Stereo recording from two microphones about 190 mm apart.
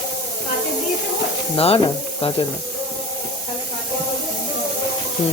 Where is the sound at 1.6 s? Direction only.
30° left (ahead or behind).